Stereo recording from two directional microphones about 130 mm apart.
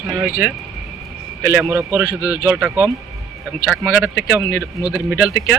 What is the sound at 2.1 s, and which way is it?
Speech, 10° right (ahead or behind).